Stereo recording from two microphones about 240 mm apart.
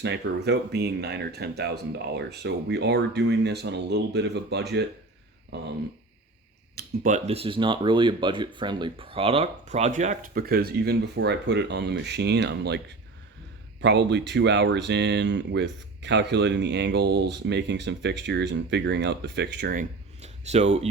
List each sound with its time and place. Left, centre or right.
0.0 s speech: right
6.7 s speech: right
13.8 s speech: right